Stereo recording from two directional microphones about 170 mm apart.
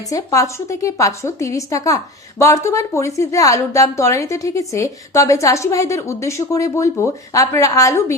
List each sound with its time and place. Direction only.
0.1 s a woman's voice: 20° left (ahead or behind)